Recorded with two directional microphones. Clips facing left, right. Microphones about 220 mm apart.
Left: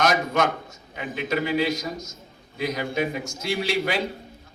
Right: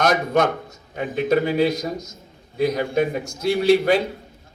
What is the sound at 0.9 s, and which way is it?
Speech, 40° right (ahead or behind).